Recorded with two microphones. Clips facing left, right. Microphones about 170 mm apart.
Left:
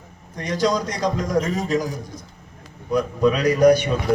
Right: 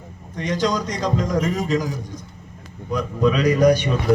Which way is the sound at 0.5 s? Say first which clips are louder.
Left 1 dB; 10° left (ahead or behind).